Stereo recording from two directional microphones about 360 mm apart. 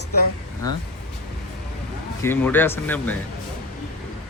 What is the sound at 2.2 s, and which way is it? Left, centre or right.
Speech, centre.